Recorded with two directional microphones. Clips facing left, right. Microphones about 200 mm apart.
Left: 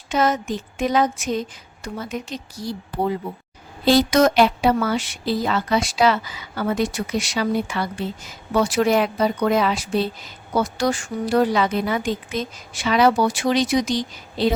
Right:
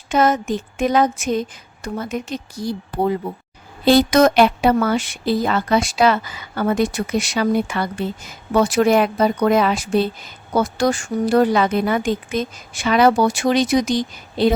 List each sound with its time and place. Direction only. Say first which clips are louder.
0.1 s a woman's voice: right 3 dB; 50° right (ahead or behind)